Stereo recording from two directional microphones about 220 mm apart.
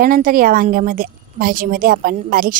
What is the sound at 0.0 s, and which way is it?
A woman's voice, 40° right (ahead or behind).